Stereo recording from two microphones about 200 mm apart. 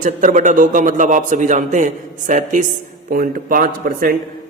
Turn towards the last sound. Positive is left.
turn(degrees=-45)  # may be behind; listen again after turning